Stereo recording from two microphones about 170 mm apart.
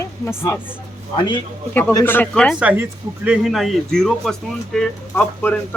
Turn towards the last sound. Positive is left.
turn(degrees=5)  # may be behind; listen again after turning